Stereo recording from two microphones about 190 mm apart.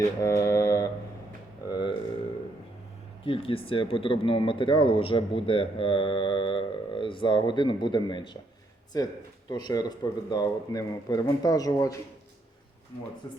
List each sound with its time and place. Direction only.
0.2 s mantra: 15° left (ahead or behind)
1.6 s speech: 20° left (ahead or behind)
3.2 s speech: 30° left (ahead or behind)
13.2 s speech: 20° left (ahead or behind)